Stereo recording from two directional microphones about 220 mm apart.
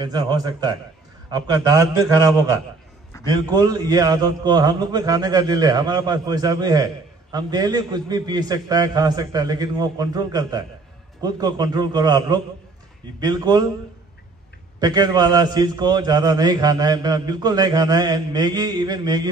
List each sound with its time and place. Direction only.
0.0 s a man's voice: 20° right (ahead or behind)
14.8 s a man's voice: 20° right (ahead or behind)